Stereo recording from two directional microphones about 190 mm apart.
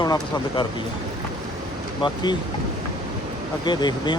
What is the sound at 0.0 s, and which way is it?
Speech, 20° left (ahead or behind).